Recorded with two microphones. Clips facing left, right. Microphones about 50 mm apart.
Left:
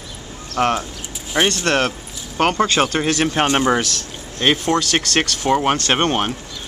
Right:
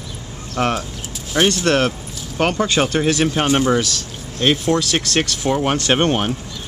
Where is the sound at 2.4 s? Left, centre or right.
Left.